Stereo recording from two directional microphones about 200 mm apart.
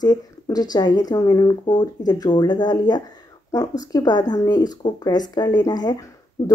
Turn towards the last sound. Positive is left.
turn(degrees=15)  # may be behind; listen again after turning